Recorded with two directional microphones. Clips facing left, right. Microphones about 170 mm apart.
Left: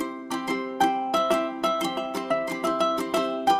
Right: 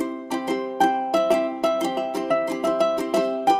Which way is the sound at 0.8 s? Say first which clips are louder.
Right 4 dB; 10° right (ahead or behind).